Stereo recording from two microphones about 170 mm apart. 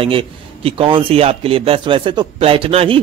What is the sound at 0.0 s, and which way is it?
A man's voice, 30° right (ahead or behind).